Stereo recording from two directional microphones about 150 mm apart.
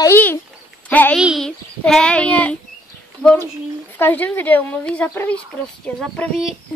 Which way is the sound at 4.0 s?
10° left (ahead or behind).